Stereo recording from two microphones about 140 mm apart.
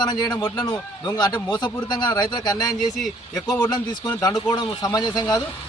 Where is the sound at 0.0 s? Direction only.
30° left (ahead or behind).